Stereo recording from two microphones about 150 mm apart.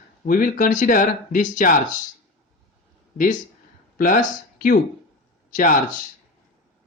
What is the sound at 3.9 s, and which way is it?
Speech, 60° left (ahead or behind).